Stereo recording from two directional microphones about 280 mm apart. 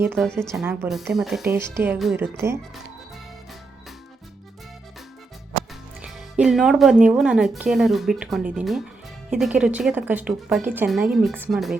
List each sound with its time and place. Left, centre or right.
0.0 s speech: centre
6.0 s speech: centre